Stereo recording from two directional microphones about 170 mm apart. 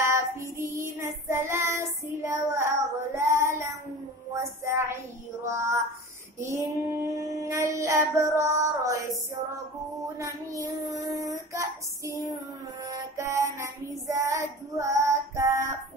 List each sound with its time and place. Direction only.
0.0 s child singing: 15° right (ahead or behind)
4.4 s a sound: 15° right (ahead or behind)
5.4 s speech: 15° right (ahead or behind)
6.4 s child singing: 15° right (ahead or behind)
10.1 s speech: 20° right (ahead or behind)
11.0 s child singing: 20° right (ahead or behind)